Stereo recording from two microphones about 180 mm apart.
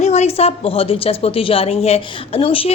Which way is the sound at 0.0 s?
40° left (ahead or behind).